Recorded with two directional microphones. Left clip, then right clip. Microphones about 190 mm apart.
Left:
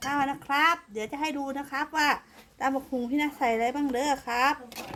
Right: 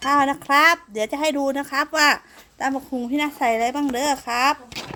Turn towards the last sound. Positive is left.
turn(degrees=-45)  # may be behind; listen again after turning